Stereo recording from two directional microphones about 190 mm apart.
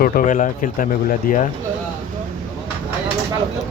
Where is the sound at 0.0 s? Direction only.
50° left (ahead or behind).